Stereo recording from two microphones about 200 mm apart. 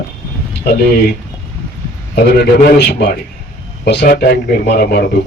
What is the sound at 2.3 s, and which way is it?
Speech, 55° left (ahead or behind).